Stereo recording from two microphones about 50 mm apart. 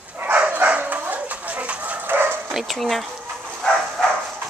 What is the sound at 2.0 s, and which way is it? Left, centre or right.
Bow-wow, right.